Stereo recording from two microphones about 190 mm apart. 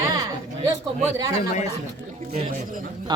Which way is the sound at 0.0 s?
20° right (ahead or behind).